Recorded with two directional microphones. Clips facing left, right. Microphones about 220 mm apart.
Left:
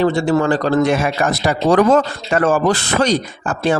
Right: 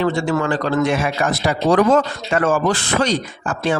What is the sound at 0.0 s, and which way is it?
A man's voice, 35° left (ahead or behind).